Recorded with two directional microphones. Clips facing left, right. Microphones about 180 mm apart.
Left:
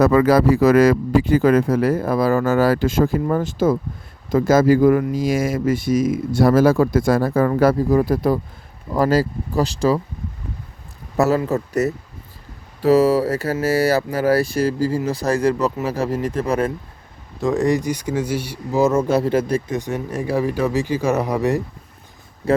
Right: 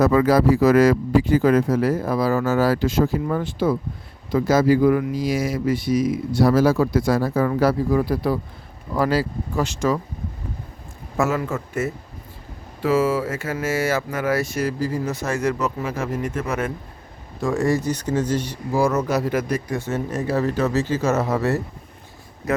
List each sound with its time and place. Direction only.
0.0 s speech: 65° left (ahead or behind); by 10.0 s 35° left (ahead or behind)
11.2 s speech: 35° left (ahead or behind)
17.4 s speech: 15° left (ahead or behind)
18.8 s speech: 25° left (ahead or behind)
22.4 s speech: 30° left (ahead or behind)